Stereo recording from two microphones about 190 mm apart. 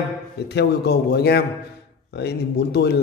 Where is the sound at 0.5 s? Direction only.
60° left (ahead or behind).